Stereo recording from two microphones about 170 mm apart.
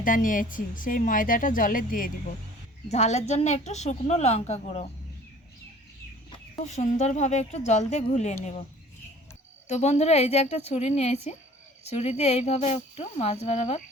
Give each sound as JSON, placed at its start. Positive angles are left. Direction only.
{"t": 0.0, "sound": "a woman's voice", "side_deg": 50}
{"t": 2.9, "sound": "speech", "side_deg": 40}
{"t": 6.7, "sound": "a woman's voice", "side_deg": 40}
{"t": 9.6, "sound": "speech", "side_deg": 40}